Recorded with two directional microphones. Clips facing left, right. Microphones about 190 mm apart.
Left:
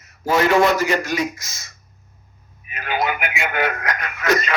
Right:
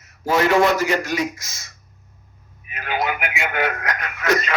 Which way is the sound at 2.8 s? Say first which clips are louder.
Left 1 dB; 40° left (ahead or behind).